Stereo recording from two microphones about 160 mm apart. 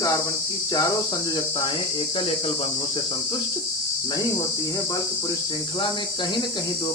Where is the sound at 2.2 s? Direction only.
35° left (ahead or behind).